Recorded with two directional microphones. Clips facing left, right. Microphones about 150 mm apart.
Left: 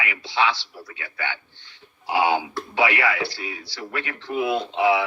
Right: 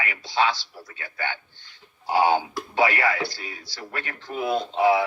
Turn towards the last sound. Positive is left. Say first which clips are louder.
# even
turn(degrees=-40)  # may be behind; listen again after turning